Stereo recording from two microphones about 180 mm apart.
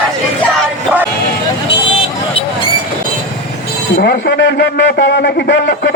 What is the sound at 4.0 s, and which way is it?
A man's voice, 65° left (ahead or behind).